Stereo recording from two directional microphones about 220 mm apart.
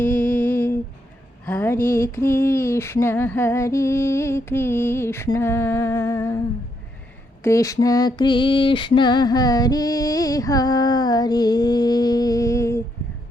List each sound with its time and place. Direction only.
0.0 s a sound: 5° left (ahead or behind)
1.9 s female singing: 10° left (ahead or behind)
7.4 s female singing: 15° left (ahead or behind)